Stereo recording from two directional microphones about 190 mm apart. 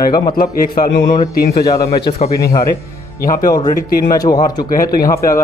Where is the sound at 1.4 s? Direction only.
55° left (ahead or behind).